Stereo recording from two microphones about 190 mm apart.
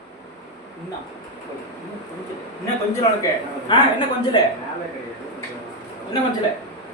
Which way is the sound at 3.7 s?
25° left (ahead or behind).